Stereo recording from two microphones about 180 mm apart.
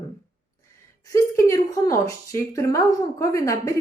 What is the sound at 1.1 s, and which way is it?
Speech, 15° left (ahead or behind).